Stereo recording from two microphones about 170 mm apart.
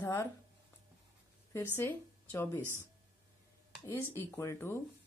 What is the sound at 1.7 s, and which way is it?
Speech, 10° left (ahead or behind).